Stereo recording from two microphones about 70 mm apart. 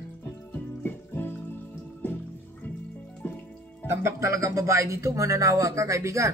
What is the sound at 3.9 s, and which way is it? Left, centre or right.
Speech, right.